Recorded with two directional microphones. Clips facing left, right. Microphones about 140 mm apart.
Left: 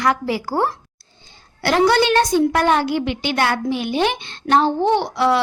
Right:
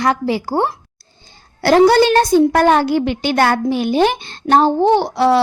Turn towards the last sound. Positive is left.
turn(degrees=-35)  # may be behind; listen again after turning